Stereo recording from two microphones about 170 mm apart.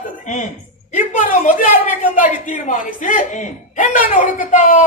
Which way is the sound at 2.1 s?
50° left (ahead or behind).